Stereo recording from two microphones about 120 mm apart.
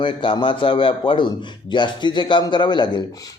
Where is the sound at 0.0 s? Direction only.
45° left (ahead or behind).